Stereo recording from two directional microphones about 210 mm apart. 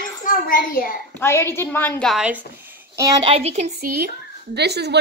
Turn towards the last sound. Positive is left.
turn(degrees=-50)  # may be behind; listen again after turning